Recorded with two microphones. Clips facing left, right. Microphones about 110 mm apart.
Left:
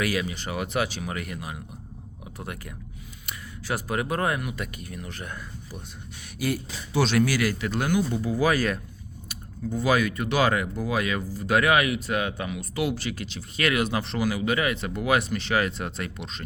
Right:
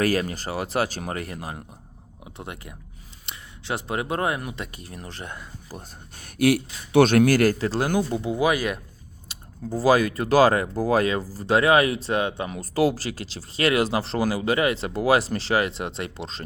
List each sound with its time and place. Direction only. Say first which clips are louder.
0.0 s speech: right 4 dB; 40° right (ahead or behind)
2.4 s speech: even; 25° right (ahead or behind)
6.4 s speech: right 8 dB; 60° right (ahead or behind)
7.6 s speech: right 2 dB; 35° right (ahead or behind)
8.2 s speech: right 1 dB; 20° right (ahead or behind)
9.3 s speech: right 1 dB; 35° right (ahead or behind)